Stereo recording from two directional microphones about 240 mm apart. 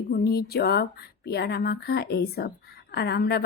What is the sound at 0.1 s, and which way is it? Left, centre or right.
Speech, left.